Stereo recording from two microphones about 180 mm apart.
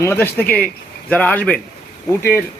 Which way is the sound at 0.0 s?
15° left (ahead or behind).